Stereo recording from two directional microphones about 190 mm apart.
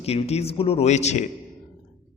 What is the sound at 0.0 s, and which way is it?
A man's voice, 30° left (ahead or behind).